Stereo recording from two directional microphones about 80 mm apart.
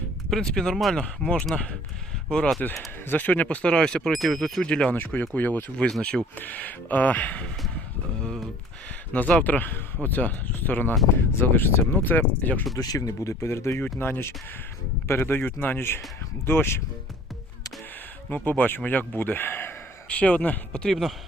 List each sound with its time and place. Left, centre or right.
0.3 s speech: centre; by 5.7 s left
5.7 s speech: centre
6.4 s speech: left
9.4 s speech: left
12.7 s speech: left
13.0 s speech: left
18.3 s speech: left
20.8 s speech: centre